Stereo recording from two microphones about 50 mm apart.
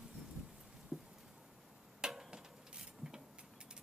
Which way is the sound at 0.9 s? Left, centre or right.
Centre.